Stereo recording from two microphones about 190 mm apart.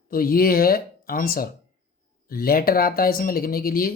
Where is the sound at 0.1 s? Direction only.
50° left (ahead or behind).